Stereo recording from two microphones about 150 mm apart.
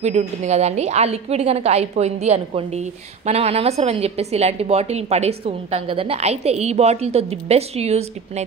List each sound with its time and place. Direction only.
0.0 s a woman's voice: 50° right (ahead or behind)